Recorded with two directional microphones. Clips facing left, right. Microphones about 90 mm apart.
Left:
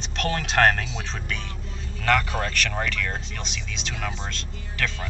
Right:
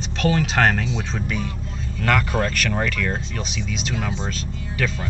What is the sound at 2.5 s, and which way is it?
Speech, 5° right (ahead or behind).